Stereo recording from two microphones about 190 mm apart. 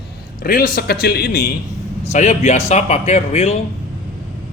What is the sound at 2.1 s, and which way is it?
A man's voice, 40° left (ahead or behind).